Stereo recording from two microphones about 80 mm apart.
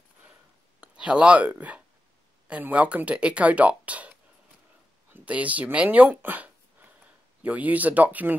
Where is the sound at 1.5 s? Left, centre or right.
Centre.